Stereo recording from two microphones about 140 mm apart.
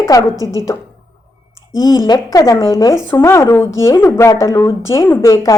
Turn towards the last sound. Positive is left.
turn(degrees=25)  # may be behind; listen again after turning